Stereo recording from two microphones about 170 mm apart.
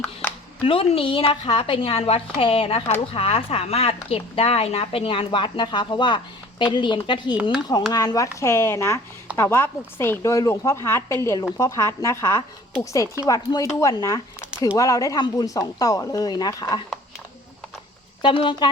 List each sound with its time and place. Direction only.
0.0 s a sound: 10° left (ahead or behind)
0.6 s a woman's voice: 35° left (ahead or behind)
18.2 s speech: 30° left (ahead or behind)